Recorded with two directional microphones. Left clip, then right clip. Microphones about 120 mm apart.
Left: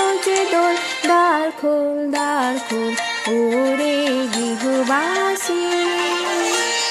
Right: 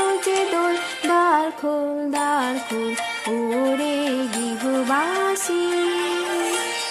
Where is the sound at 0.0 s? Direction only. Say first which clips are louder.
Left 3 dB; 25° left (ahead or behind).